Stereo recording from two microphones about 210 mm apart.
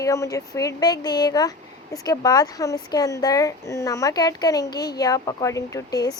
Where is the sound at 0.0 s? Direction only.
15° left (ahead or behind).